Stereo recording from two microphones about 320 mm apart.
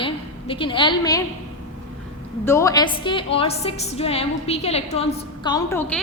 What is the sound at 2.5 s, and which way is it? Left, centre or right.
A woman's voice, centre.